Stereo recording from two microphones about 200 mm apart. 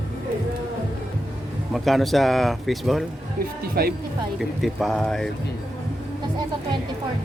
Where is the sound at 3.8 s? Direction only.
50° right (ahead or behind).